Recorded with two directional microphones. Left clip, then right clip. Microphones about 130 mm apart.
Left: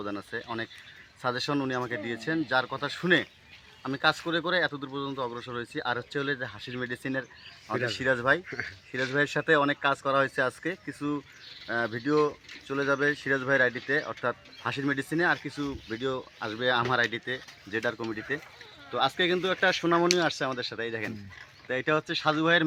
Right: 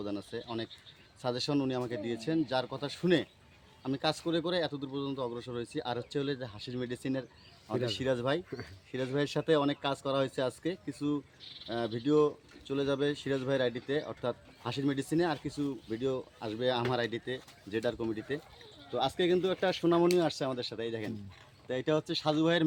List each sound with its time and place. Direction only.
0.0 s speech: 5° right (ahead or behind)